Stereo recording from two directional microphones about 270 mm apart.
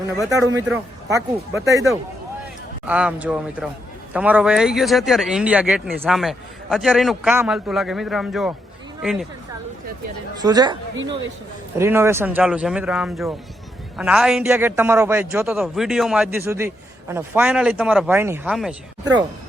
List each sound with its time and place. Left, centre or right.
0.3 s a man's voice: centre
10.4 s speech: centre
11.8 s a man's voice: centre